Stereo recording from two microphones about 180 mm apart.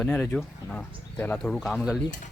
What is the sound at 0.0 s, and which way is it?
Speech, 5° left (ahead or behind).